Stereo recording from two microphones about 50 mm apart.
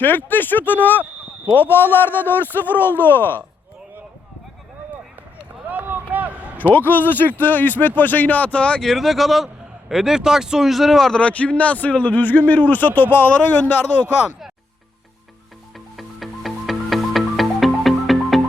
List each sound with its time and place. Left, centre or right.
0.0 s a man's voice: left
5.6 s run: right
6.7 s speech: left
8.8 s speech: centre
11.2 s speech: left
16.0 s music: centre